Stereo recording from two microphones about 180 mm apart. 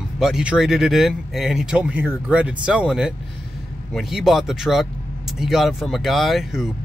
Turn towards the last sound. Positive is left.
turn(degrees=0)  # may be behind; listen again after turning